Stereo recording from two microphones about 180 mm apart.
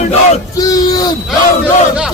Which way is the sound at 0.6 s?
20° left (ahead or behind).